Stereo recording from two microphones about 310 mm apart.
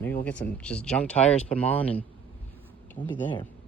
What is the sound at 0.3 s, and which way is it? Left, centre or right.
Speech, centre.